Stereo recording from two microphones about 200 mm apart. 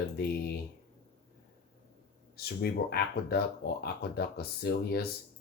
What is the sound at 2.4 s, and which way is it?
Speech, 50° left (ahead or behind).